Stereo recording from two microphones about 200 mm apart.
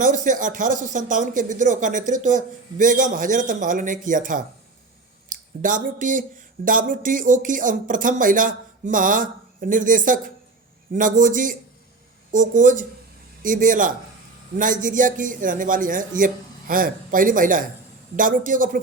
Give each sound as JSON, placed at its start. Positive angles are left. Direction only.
{"t": 0.0, "sound": "a man's voice", "side_deg": -40}